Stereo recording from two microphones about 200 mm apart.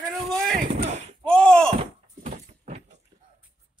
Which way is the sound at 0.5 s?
45° right (ahead or behind).